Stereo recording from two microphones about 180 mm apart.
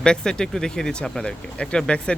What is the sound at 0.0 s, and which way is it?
Speech, 5° left (ahead or behind).